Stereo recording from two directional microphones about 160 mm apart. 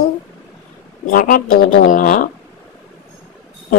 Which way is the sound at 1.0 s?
60° left (ahead or behind).